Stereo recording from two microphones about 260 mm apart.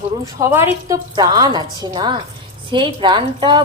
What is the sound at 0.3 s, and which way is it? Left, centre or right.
Speech, centre.